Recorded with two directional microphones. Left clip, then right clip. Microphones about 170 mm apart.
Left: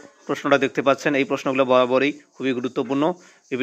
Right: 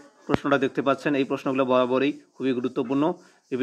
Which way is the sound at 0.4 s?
15° left (ahead or behind).